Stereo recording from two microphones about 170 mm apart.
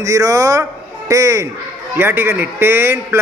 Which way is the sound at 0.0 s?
20° right (ahead or behind).